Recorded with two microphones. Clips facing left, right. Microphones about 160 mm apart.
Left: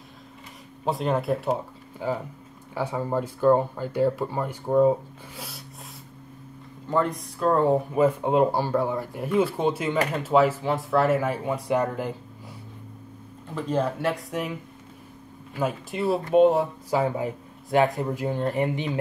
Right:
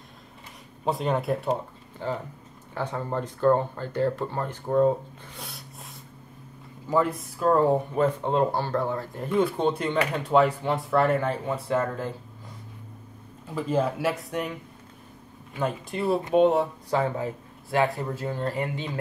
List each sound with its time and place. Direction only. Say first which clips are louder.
0.8 s speech: left 1 dB; centre (ahead or behind)
6.9 s speech: even; 5° right (ahead or behind); by 12.1 s 15° left (ahead or behind)
13.6 s speech: even; 5° right (ahead or behind)
15.5 s speech: left 1 dB; 5° left (ahead or behind)
17.6 s speech: left 3 dB; 20° left (ahead or behind)